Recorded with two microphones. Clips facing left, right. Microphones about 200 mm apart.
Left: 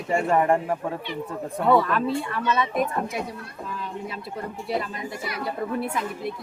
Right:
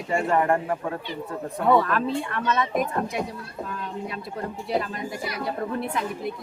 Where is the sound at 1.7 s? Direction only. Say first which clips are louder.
Even; centre (ahead or behind).